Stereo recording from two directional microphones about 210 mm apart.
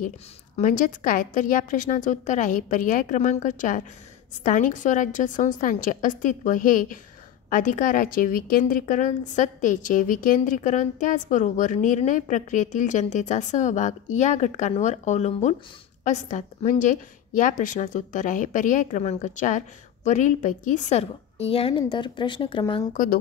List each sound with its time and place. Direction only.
0.6 s a woman's voice: 35° left (ahead or behind)